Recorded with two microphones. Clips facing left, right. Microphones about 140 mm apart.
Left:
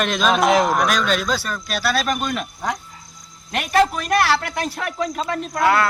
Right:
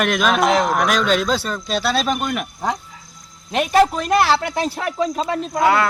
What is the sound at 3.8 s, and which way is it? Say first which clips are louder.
Speech: even; 25° right (ahead or behind).